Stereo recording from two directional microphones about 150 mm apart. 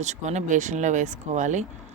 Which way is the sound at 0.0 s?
50° right (ahead or behind).